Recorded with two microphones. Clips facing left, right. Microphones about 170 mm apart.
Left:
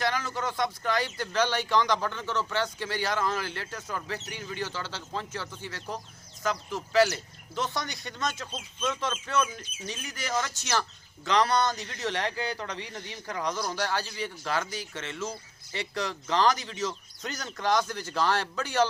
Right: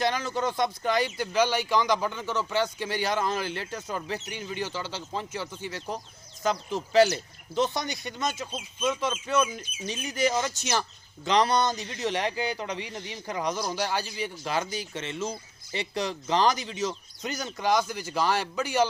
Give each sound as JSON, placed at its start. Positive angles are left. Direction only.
{"t": 0.0, "sound": "a man's voice", "side_deg": -20}